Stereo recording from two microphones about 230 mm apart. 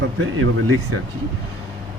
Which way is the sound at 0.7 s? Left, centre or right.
Right.